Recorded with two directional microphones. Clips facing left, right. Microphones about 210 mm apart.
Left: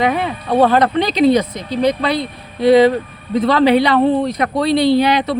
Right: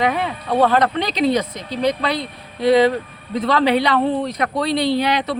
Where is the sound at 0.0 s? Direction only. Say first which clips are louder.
Left 3 dB; 15° left (ahead or behind).